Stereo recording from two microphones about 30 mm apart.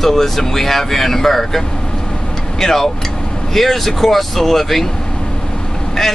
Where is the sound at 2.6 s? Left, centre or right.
Centre.